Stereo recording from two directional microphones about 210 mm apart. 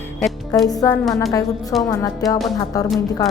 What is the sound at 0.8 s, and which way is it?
A woman's voice, 15° left (ahead or behind).